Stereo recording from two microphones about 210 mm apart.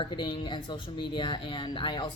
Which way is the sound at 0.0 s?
20° left (ahead or behind).